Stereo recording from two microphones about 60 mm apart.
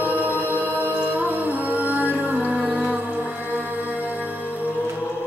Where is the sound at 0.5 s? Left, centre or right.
Right.